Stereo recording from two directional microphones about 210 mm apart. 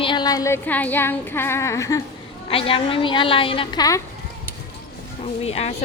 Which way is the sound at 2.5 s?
25° left (ahead or behind).